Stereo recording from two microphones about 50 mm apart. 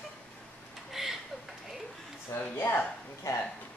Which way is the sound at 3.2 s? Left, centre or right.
Left.